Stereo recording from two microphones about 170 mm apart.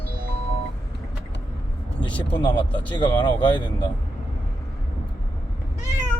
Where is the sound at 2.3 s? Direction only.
30° left (ahead or behind).